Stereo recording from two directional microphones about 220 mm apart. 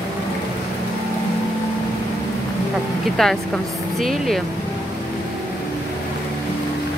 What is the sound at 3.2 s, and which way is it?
Speech, centre (ahead or behind).